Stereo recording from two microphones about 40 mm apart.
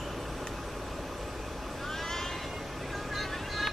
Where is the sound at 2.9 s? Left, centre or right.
Centre.